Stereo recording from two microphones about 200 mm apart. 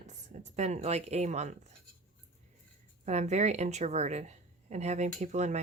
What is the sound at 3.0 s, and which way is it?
A woman's voice, 35° right (ahead or behind).